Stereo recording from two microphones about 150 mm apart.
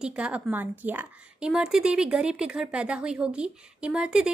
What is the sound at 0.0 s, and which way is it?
A woman's voice, 10° right (ahead or behind).